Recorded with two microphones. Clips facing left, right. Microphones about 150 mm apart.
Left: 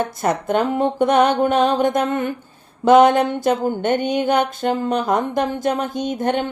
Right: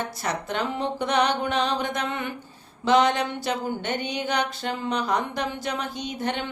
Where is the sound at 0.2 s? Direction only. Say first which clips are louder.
Left 10 dB; 50° left (ahead or behind).